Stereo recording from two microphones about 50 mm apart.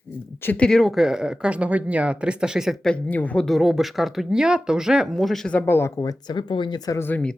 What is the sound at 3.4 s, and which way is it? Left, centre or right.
Speech, centre.